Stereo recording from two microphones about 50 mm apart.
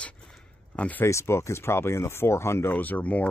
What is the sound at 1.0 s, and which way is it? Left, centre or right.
Speech, left.